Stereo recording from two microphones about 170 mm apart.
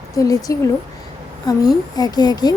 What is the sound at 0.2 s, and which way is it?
Speech, 20° left (ahead or behind).